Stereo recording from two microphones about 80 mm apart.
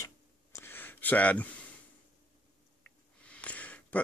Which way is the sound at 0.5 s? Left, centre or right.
Left.